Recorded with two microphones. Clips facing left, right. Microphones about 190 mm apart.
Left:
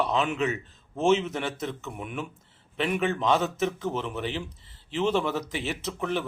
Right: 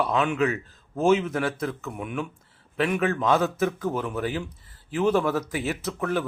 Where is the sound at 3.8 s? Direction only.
20° left (ahead or behind).